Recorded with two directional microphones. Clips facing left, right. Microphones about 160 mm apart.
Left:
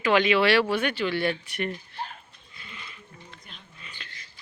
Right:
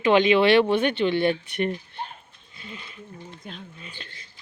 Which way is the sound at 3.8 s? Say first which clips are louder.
Right 4 dB; 35° right (ahead or behind).